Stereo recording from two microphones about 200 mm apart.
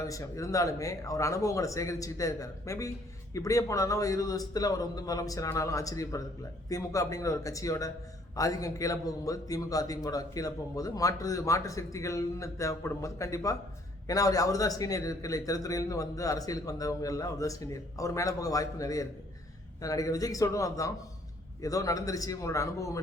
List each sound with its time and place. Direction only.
0.0 s a man's voice: 15° left (ahead or behind)